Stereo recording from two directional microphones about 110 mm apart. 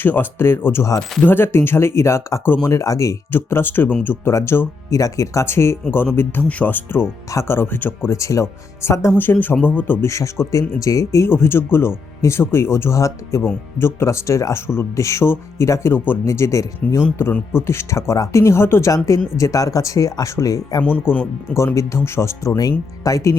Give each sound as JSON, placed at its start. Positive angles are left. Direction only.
{"t": 0.0, "sound": "speech", "side_deg": 20}
{"t": 21.1, "sound": "speech", "side_deg": 20}